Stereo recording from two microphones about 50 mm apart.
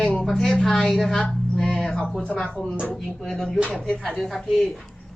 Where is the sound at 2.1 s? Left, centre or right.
Left.